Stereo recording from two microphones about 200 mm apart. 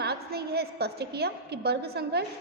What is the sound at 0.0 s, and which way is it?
A woman's voice, 55° right (ahead or behind).